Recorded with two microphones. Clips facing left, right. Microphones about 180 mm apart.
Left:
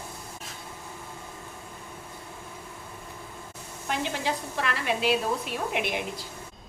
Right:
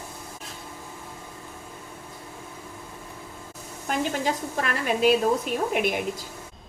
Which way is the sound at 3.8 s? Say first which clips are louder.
Right 3 dB; 45° right (ahead or behind).